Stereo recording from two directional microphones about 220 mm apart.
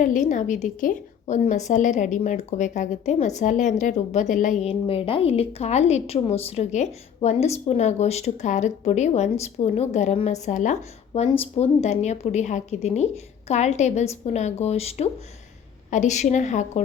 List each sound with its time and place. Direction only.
0.0 s a woman's voice: 35° left (ahead or behind)